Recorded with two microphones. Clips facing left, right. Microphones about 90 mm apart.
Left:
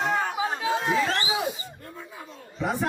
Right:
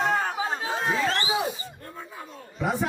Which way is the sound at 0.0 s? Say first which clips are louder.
Even; 40° right (ahead or behind).